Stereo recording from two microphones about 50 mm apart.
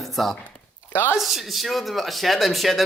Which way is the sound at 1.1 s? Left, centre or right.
Centre.